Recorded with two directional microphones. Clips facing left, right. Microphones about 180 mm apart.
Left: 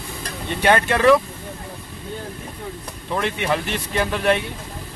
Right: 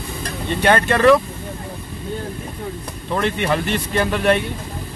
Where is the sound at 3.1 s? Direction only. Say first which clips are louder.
Right 2 dB; 5° left (ahead or behind).